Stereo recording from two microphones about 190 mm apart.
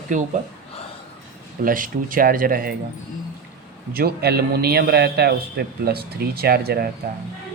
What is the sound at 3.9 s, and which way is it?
A man's voice, 55° right (ahead or behind).